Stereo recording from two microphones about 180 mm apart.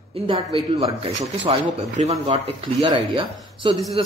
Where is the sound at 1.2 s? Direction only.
40° right (ahead or behind).